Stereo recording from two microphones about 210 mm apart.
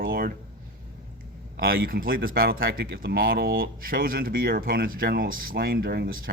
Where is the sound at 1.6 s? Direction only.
45° right (ahead or behind).